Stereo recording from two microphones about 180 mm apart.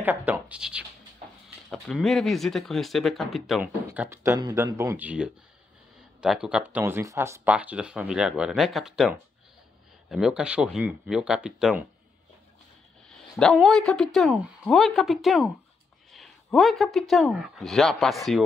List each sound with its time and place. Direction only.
0.0 s speech: 10° right (ahead or behind)
3.8 s speech: 10° right (ahead or behind)
13.1 s speech: 5° left (ahead or behind)
16.1 s a sound: centre (ahead or behind)
17.1 s speech: centre (ahead or behind)